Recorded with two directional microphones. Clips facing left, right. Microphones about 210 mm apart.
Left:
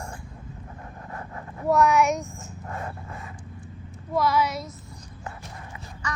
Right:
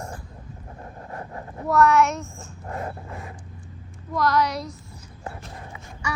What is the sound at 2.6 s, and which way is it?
Dog, 30° right (ahead or behind).